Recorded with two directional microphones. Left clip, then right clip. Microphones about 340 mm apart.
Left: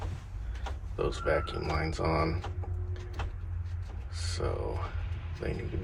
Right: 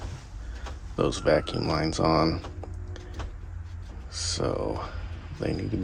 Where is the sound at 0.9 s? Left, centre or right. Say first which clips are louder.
Right 7 dB; right.